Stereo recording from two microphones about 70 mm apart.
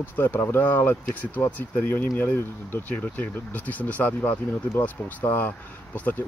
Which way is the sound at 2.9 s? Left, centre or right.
Left.